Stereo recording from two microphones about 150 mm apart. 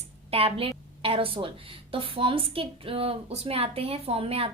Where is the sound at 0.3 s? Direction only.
40° right (ahead or behind).